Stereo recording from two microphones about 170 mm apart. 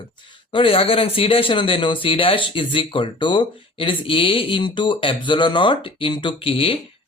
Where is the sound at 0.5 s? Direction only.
35° left (ahead or behind).